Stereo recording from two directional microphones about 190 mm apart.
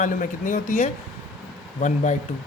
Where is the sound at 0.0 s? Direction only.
45° left (ahead or behind).